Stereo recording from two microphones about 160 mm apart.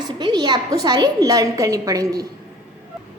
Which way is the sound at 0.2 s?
30° right (ahead or behind).